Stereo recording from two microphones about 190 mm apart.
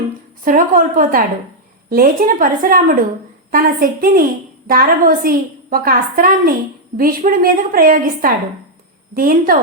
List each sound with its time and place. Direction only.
0.4 s a woman's voice: 45° right (ahead or behind)